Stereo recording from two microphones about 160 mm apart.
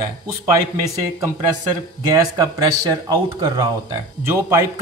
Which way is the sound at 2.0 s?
20° right (ahead or behind).